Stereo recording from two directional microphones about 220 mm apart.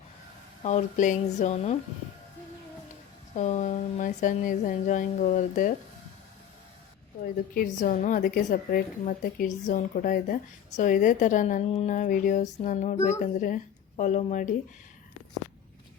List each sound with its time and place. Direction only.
0.6 s a woman's voice: 30° left (ahead or behind)
3.3 s a woman's voice: 30° left (ahead or behind)
7.5 s a woman's voice: 40° left (ahead or behind)